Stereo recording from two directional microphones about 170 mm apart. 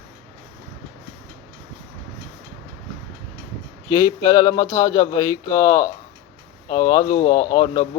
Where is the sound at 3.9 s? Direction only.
25° left (ahead or behind).